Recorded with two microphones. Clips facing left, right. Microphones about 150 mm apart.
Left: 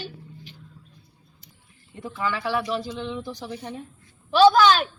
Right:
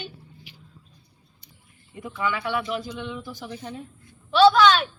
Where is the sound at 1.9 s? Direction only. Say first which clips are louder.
Even; centre (ahead or behind).